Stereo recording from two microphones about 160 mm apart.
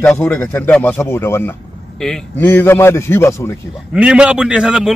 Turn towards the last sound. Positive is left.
turn(degrees=-5)  # may be behind; listen again after turning